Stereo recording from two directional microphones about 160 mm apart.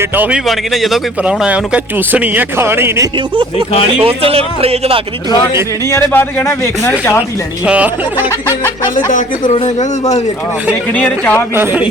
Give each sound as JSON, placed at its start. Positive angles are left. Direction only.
{"t": 0.0, "sound": "speech", "side_deg": -10}
{"t": 4.0, "sound": "speech", "side_deg": -35}
{"t": 5.9, "sound": "a man's voice", "side_deg": 15}
{"t": 7.2, "sound": "speech", "side_deg": -10}
{"t": 9.0, "sound": "speech", "side_deg": 50}
{"t": 10.7, "sound": "a man's voice", "side_deg": 10}
{"t": 11.5, "sound": "speech", "side_deg": -10}